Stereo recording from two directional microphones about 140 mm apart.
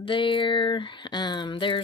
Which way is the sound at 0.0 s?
35° left (ahead or behind).